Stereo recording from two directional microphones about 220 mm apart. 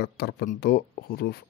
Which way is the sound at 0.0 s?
45° left (ahead or behind).